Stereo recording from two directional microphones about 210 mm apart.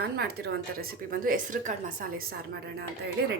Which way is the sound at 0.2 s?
45° right (ahead or behind).